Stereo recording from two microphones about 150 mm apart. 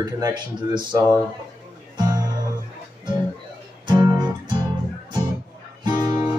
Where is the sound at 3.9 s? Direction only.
30° right (ahead or behind).